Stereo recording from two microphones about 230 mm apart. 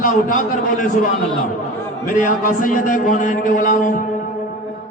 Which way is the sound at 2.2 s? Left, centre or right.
Left.